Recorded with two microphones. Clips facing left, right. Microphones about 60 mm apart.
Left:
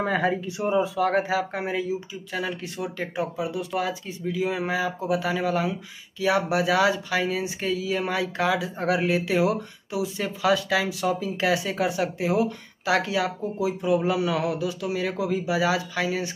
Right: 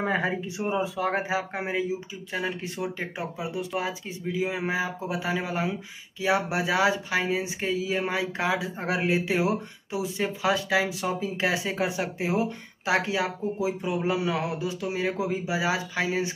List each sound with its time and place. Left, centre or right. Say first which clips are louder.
0.0 s speech: left 3 dB; right